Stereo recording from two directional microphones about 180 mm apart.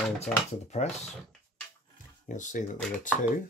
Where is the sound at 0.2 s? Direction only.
40° left (ahead or behind).